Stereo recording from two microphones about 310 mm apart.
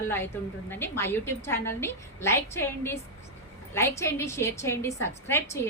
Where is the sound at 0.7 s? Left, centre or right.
Centre.